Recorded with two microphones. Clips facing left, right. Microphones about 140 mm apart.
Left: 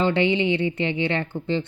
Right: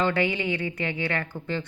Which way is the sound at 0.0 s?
25° left (ahead or behind).